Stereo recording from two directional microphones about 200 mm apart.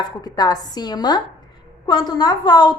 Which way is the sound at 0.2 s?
20° left (ahead or behind).